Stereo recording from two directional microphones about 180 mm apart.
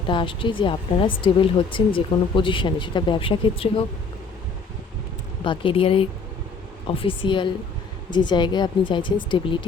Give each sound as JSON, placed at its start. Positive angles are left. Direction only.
{"t": 0.1, "sound": "a woman's voice", "side_deg": 30}
{"t": 5.4, "sound": "a woman's voice", "side_deg": 30}